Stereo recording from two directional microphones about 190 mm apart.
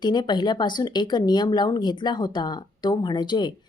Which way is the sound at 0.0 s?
20° left (ahead or behind).